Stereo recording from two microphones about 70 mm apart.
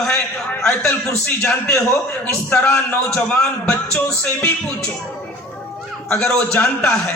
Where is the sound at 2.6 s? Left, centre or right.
Left.